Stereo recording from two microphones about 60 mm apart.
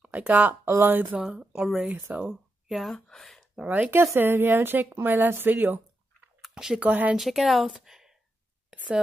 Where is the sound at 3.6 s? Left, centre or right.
Centre.